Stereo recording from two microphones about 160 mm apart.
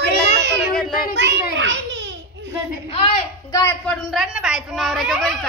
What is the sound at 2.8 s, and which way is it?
Speech, 35° left (ahead or behind).